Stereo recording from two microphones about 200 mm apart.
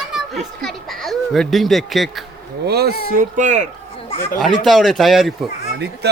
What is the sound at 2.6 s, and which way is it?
Speech, 55° right (ahead or behind).